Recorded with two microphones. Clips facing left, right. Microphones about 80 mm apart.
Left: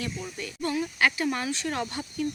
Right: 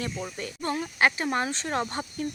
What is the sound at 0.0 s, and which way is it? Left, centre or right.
Speech, right.